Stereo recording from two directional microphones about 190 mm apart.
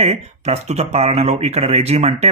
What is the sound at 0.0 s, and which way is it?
Speech, 35° right (ahead or behind).